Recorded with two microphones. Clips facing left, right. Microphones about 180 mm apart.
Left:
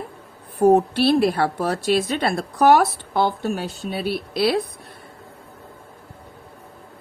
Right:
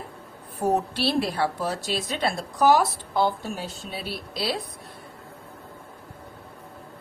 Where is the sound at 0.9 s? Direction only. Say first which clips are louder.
Left 7 dB; 55° left (ahead or behind).